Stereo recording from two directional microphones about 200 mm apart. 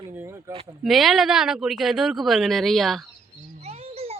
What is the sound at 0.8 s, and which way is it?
Speech, centre (ahead or behind).